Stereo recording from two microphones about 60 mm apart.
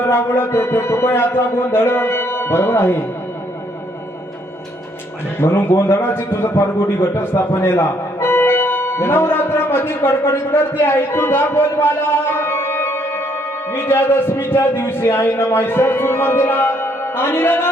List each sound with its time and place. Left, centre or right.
0.0 s a man's voice: left
5.4 s a man's voice: left